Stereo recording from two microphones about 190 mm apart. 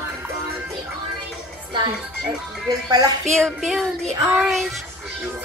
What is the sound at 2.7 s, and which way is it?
Speech, 20° right (ahead or behind).